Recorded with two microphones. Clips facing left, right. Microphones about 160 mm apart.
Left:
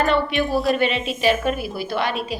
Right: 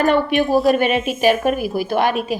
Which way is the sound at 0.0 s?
45° right (ahead or behind).